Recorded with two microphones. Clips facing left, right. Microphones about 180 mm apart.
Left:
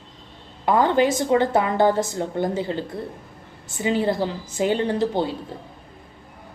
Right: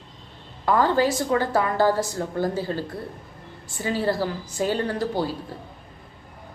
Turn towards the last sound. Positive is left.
turn(degrees=20)  # may be behind; listen again after turning